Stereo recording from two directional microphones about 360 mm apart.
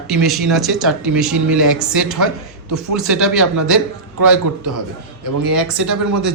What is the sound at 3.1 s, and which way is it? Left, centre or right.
Speech, centre.